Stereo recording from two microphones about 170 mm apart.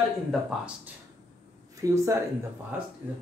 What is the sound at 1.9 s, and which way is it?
Speech, 15° right (ahead or behind).